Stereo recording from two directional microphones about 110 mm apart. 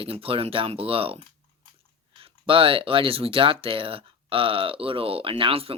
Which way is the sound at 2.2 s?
55° right (ahead or behind).